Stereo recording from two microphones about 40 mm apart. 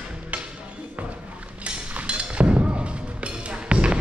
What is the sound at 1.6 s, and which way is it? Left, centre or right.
Music, right.